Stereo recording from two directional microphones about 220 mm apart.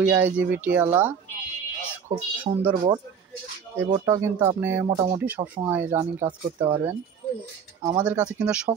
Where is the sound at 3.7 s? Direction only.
15° right (ahead or behind).